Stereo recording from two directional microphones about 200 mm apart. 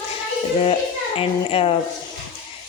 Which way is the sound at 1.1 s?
30° left (ahead or behind).